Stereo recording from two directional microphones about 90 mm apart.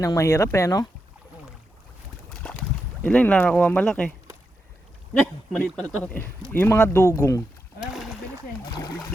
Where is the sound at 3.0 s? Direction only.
15° left (ahead or behind).